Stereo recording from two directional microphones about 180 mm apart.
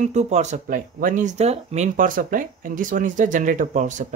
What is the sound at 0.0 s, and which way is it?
Speech, 40° right (ahead or behind).